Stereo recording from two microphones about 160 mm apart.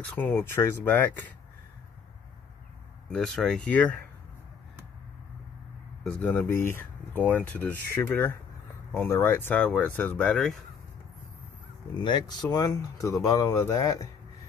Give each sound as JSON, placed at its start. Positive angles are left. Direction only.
{"t": 0.2, "sound": "speech", "side_deg": 15}
{"t": 3.1, "sound": "speech", "side_deg": 5}
{"t": 6.0, "sound": "speech", "side_deg": 10}
{"t": 11.9, "sound": "speech", "side_deg": 30}